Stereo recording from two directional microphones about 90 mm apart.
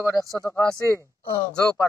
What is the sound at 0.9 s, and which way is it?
Speech, 35° left (ahead or behind).